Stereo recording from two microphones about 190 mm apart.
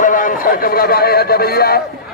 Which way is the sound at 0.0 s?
45° left (ahead or behind).